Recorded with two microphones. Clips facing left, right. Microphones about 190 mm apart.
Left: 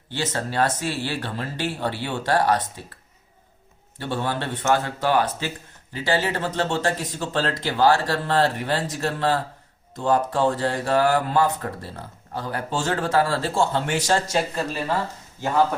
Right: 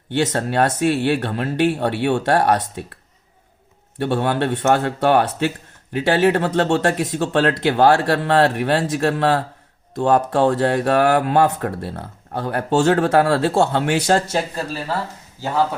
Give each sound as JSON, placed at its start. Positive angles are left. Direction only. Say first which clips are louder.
{"t": 0.1, "sound": "speech", "louder": "right 7 dB", "side_deg": -65}
{"t": 3.9, "sound": "speech", "louder": "right 7 dB", "side_deg": -65}